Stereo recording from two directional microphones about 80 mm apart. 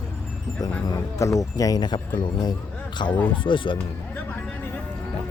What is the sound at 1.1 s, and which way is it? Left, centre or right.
Speech, left.